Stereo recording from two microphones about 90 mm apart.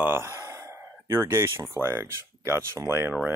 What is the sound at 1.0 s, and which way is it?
Speech, 30° right (ahead or behind).